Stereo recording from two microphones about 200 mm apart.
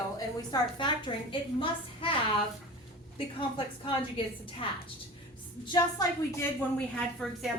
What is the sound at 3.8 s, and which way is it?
A woman's voice, 25° left (ahead or behind).